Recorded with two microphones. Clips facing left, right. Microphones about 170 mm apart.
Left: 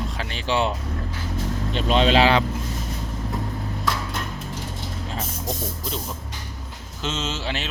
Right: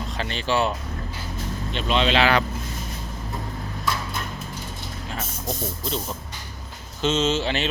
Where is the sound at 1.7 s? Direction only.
40° left (ahead or behind).